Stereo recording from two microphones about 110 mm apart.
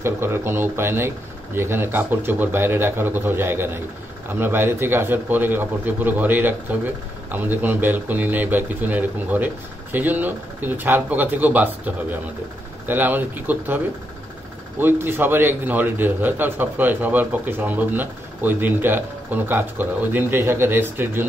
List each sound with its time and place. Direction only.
0.0 s a man's voice: 20° right (ahead or behind)
14.8 s a man's voice: 20° right (ahead or behind)